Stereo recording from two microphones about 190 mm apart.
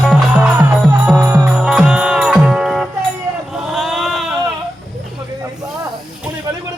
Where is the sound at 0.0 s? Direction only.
Centre (ahead or behind).